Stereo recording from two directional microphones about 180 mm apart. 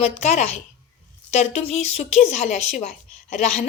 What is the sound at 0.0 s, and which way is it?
A woman's voice, 35° left (ahead or behind).